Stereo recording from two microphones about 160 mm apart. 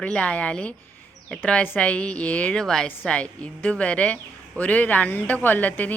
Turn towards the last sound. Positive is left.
turn(degrees=10)  # may be behind; listen again after turning